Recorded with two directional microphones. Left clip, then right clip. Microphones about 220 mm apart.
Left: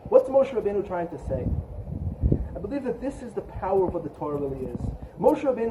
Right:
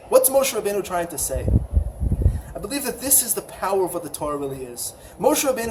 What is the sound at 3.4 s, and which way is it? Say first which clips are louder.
A man's voice: even; 20° right (ahead or behind).